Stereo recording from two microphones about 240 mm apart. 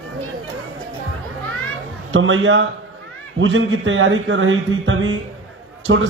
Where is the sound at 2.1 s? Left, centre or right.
Right.